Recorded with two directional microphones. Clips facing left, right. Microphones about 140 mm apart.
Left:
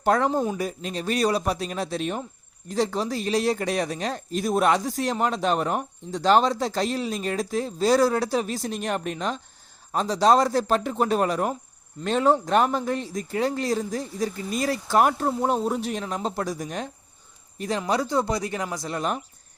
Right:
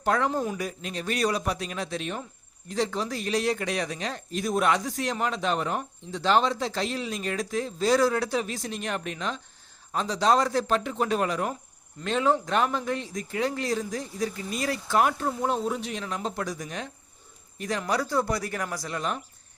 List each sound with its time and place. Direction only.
0.0 s speech: 40° left (ahead or behind)
0.3 s speech: 30° left (ahead or behind)
17.6 s speech: 25° left (ahead or behind)
18.9 s speech: 35° left (ahead or behind)